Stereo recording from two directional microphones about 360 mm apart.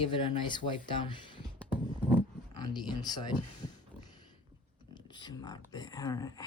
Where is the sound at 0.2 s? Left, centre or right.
Centre.